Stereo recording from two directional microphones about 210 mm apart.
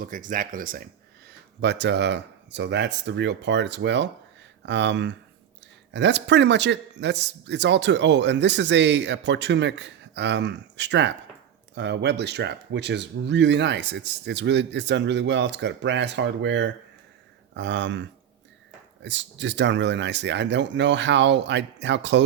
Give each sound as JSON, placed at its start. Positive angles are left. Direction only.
{"t": 0.0, "sound": "speech", "side_deg": -40}
{"t": 1.6, "sound": "a man's voice", "side_deg": -55}